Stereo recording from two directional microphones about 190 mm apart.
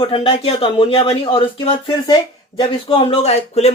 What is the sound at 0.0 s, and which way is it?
A man's voice, 30° left (ahead or behind).